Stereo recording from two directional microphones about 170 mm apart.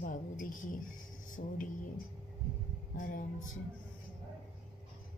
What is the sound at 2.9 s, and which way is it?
Speech, 55° left (ahead or behind).